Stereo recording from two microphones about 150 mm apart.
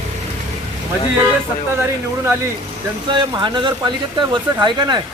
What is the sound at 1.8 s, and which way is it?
Speech, 15° right (ahead or behind).